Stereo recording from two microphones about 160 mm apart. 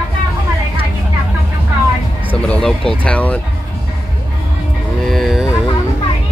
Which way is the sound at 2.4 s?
5° left (ahead or behind).